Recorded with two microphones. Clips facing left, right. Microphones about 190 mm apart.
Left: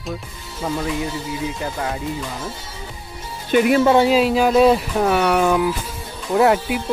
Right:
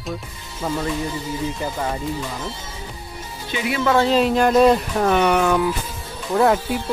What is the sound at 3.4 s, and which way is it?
Speech, 50° left (ahead or behind).